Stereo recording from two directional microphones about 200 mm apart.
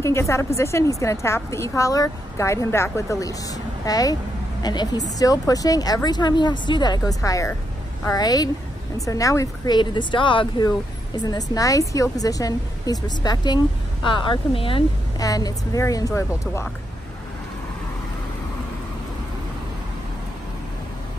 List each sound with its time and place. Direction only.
0.0 s a woman's voice: 15° left (ahead or behind)